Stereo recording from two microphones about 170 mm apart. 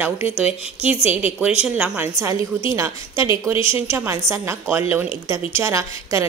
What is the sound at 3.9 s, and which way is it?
A woman's voice, 15° right (ahead or behind).